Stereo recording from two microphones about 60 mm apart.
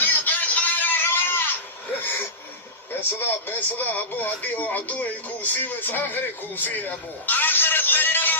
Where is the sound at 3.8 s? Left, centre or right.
Left.